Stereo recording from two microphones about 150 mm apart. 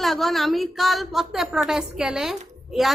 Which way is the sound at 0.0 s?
Centre (ahead or behind).